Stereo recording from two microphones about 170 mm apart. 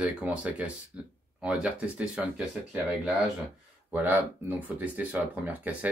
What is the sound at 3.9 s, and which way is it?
Speech, 10° right (ahead or behind).